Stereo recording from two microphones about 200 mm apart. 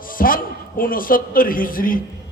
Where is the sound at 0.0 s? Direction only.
45° left (ahead or behind).